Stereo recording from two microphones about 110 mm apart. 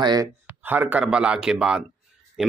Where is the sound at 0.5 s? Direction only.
15° right (ahead or behind).